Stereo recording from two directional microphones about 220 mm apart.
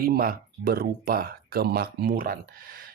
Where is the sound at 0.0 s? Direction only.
40° right (ahead or behind).